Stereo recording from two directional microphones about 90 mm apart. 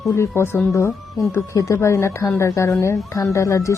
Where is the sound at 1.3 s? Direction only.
35° left (ahead or behind).